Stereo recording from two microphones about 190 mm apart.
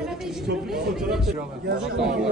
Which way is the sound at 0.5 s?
Centre (ahead or behind).